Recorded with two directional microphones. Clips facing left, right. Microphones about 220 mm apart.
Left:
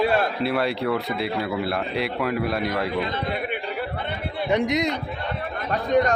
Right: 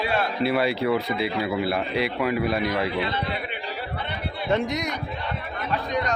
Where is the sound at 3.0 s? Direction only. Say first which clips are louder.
Left 1 dB; 50° left (ahead or behind).